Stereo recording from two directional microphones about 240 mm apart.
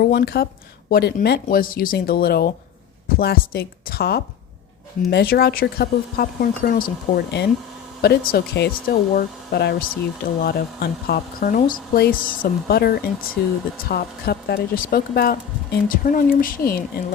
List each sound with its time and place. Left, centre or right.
0.0 s speech: left